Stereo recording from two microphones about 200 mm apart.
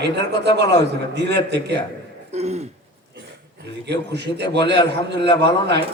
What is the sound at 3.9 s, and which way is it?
A man's voice, 55° right (ahead or behind).